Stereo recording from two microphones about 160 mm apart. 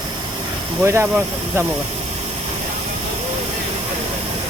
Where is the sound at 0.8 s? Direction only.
15° right (ahead or behind).